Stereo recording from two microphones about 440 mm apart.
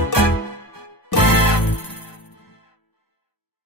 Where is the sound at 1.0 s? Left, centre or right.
Left.